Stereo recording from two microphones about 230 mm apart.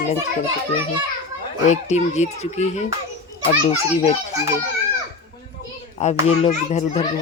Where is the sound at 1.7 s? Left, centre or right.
Left.